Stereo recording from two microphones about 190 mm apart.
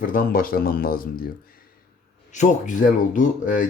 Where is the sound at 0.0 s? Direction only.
50° left (ahead or behind).